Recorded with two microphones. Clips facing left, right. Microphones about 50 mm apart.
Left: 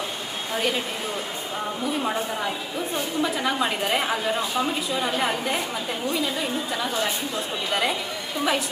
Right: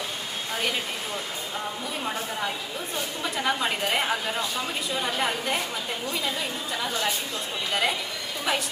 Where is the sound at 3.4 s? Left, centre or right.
Centre.